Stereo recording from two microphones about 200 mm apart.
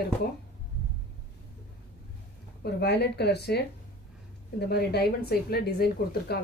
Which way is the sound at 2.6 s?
55° left (ahead or behind).